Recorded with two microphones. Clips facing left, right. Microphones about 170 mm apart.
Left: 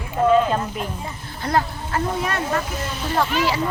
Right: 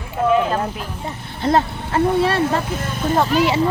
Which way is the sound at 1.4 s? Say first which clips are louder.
Right 4 dB; 25° right (ahead or behind).